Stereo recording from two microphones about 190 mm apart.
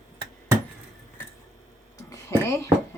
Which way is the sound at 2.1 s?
15° left (ahead or behind).